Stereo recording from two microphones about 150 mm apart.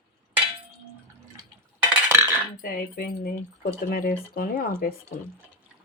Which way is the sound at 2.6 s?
75° left (ahead or behind).